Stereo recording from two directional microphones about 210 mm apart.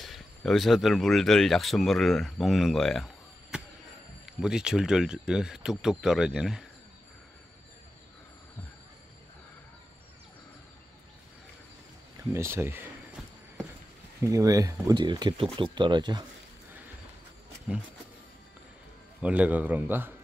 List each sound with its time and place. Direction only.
0.0 s speech: centre (ahead or behind)
3.5 s a sound: 5° right (ahead or behind)
4.3 s speech: 5° right (ahead or behind)
12.3 s a sound: 10° right (ahead or behind)
14.2 s speech: 15° right (ahead or behind)
19.2 s a man's voice: 5° right (ahead or behind)